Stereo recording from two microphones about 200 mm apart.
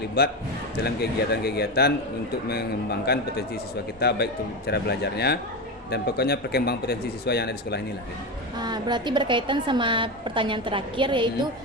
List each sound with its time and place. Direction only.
0.2 s speech: 50° left (ahead or behind)
8.5 s a woman's voice: 20° right (ahead or behind)